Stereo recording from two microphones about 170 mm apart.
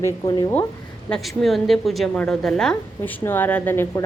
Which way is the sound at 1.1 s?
Centre (ahead or behind).